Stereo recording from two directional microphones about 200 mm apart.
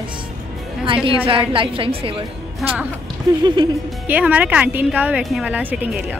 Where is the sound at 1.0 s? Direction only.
25° right (ahead or behind).